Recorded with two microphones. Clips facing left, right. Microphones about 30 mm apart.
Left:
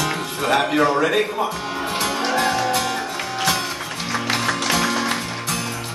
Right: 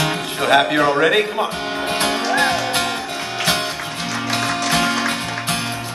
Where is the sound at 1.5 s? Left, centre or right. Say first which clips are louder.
Right 3 dB; right.